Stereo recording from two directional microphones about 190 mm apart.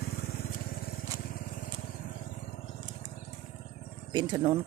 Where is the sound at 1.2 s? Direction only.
50° left (ahead or behind).